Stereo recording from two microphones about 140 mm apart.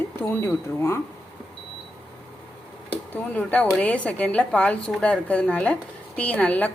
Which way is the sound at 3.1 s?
10° left (ahead or behind).